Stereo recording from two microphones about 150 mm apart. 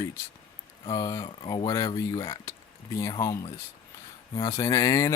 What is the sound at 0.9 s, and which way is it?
Speech, 25° left (ahead or behind).